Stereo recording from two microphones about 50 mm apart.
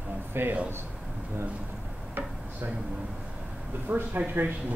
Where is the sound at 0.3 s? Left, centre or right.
Right.